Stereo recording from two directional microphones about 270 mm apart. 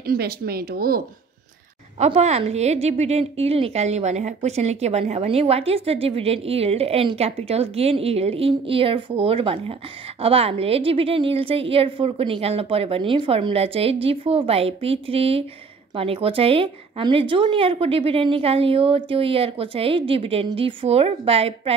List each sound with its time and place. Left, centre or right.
0.0 s speech: right
2.0 s a woman's voice: right